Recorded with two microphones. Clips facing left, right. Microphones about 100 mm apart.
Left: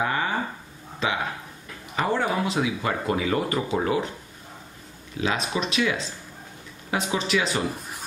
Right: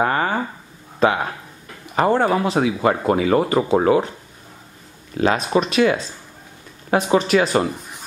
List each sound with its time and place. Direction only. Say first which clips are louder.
0.0 s a sound: right 6 dB; 50° right (ahead or behind)
0.9 s speech: right 8 dB; 45° right (ahead or behind)
5.1 s speech: right 8 dB; 50° right (ahead or behind)